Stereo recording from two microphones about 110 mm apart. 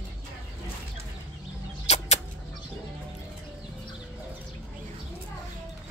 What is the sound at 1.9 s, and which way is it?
Chicken, 85° left.